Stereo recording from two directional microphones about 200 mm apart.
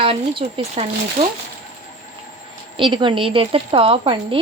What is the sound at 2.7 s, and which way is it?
Speech, 25° right (ahead or behind).